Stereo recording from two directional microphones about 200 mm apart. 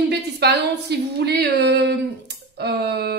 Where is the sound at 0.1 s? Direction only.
55° right (ahead or behind).